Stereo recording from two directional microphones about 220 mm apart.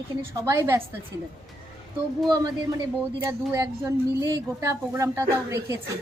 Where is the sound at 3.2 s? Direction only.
15° right (ahead or behind).